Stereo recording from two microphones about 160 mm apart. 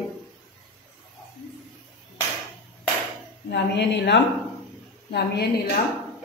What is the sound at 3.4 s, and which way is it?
Speech, 90° left.